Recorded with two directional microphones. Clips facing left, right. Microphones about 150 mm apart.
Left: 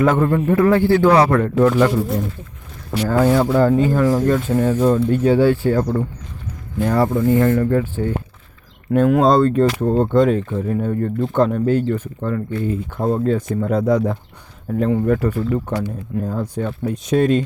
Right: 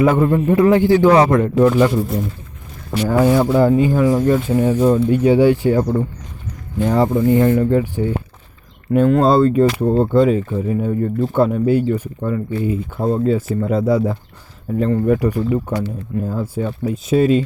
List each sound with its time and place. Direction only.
0.0 s speech: 10° right (ahead or behind)
3.0 s speech: 10° right (ahead or behind)
8.9 s speech: centre (ahead or behind)
15.0 s speech: 15° right (ahead or behind)